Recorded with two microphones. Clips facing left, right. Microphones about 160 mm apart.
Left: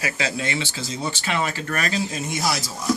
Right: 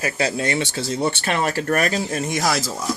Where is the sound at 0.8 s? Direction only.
60° right (ahead or behind).